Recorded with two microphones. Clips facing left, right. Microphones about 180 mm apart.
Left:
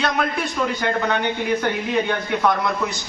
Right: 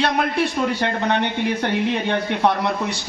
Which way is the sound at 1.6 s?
30° right (ahead or behind).